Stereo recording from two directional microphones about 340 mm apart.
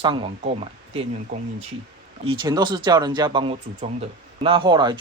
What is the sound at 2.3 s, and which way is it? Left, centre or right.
Speech, centre.